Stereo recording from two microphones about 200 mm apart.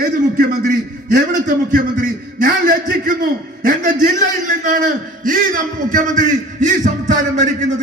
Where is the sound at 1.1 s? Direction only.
40° right (ahead or behind).